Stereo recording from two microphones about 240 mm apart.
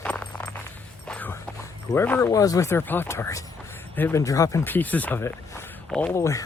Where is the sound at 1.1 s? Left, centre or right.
Centre.